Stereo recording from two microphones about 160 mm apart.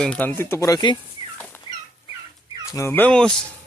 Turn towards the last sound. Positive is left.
turn(degrees=5)  # may be behind; listen again after turning